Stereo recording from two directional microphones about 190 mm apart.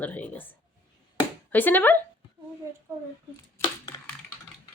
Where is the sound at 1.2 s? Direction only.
10° left (ahead or behind).